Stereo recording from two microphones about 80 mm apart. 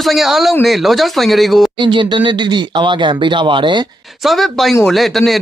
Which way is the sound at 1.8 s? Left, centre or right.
Right.